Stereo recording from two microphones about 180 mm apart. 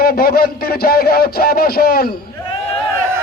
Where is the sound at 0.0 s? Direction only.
55° left (ahead or behind).